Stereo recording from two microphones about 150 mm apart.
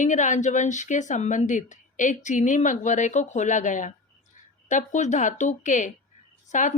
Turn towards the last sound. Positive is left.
turn(degrees=55)  # may be behind; listen again after turning